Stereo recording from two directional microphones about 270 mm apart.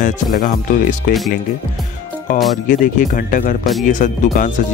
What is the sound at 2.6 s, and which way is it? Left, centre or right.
Speech, left.